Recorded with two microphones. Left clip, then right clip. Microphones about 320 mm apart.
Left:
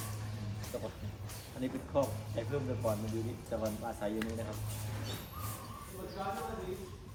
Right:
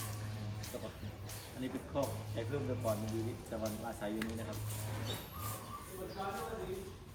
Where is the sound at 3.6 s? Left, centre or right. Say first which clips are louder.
Left 3 dB; centre.